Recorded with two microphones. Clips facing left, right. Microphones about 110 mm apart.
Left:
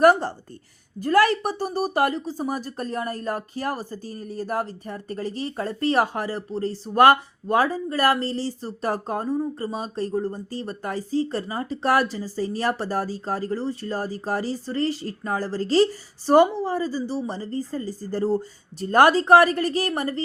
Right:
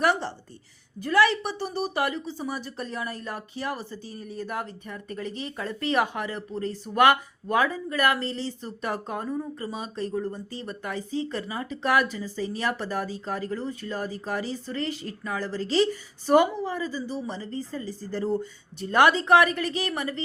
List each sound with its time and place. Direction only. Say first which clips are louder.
0.0 s a woman's voice: left 8 dB; 45° left (ahead or behind)